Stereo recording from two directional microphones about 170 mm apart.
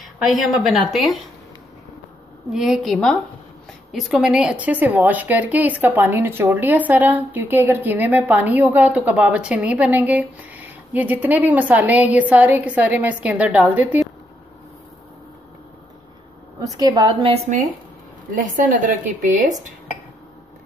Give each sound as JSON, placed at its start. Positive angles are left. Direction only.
{"t": 0.0, "sound": "a sound", "side_deg": 0}
{"t": 0.7, "sound": "a woman's voice", "side_deg": 0}
{"t": 2.5, "sound": "a woman's voice", "side_deg": -5}
{"t": 16.5, "sound": "a woman's voice", "side_deg": -20}
{"t": 18.3, "sound": "a woman's voice", "side_deg": -50}